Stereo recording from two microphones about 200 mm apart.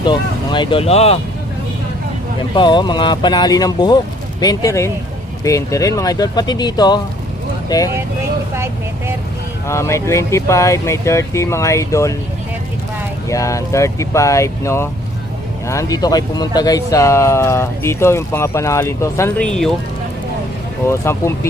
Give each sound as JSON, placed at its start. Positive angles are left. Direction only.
{"t": 0.0, "sound": "speech", "side_deg": 25}
{"t": 2.6, "sound": "speech", "side_deg": 25}
{"t": 8.5, "sound": "vehicle", "side_deg": -10}
{"t": 9.6, "sound": "speech", "side_deg": 15}
{"t": 13.2, "sound": "speech", "side_deg": 15}
{"t": 20.8, "sound": "speech", "side_deg": 15}